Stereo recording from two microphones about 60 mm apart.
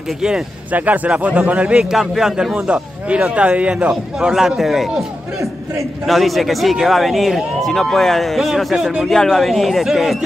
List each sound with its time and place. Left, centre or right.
0.7 s a man's voice: right
1.9 s a man's voice: centre
2.5 s a man's voice: centre
4.2 s a man's voice: centre
9.0 s a man's voice: centre